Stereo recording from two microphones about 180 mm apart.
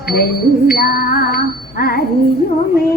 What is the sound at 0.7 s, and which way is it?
Music, 55° left (ahead or behind).